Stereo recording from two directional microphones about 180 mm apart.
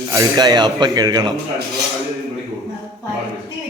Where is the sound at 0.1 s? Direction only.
20° right (ahead or behind).